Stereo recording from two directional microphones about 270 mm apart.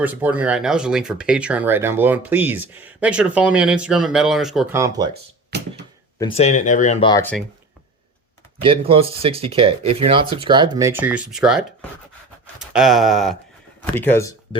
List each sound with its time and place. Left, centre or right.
0.0 s speech: centre
6.1 s speech: left
7.1 s speech: centre
8.6 s speech: right; by 11.9 s centre
12.5 s a sound: centre
13.9 s speech: centre